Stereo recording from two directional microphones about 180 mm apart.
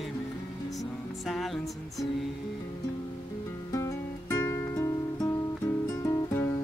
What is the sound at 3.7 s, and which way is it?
Music, 20° left (ahead or behind).